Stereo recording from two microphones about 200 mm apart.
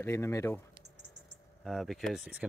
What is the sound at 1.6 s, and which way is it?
Speech, centre (ahead or behind).